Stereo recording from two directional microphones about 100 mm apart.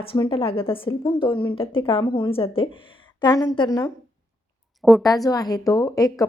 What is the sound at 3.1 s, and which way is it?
Speech, 40° left (ahead or behind).